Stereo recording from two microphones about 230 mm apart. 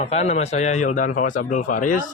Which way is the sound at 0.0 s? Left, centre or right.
Left.